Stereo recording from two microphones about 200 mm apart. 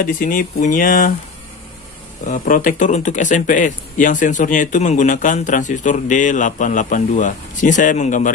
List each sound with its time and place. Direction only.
0.0 s speech: 45° left (ahead or behind)
2.2 s a man's voice: 40° left (ahead or behind)